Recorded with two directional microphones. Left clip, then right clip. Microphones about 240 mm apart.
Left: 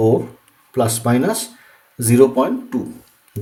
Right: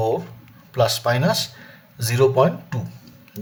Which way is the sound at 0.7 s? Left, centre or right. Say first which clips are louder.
Left 1 dB; right.